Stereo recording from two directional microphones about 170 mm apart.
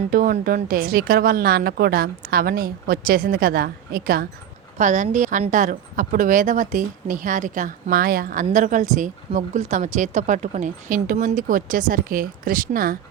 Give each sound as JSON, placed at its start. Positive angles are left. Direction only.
{"t": 0.1, "sound": "a woman's voice", "side_deg": -55}
{"t": 4.8, "sound": "speech", "side_deg": -45}